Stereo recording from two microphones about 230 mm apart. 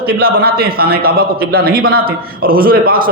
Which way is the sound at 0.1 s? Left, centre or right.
Right.